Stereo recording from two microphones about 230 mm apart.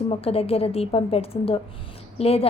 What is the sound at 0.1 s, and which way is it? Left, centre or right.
A woman's voice, left.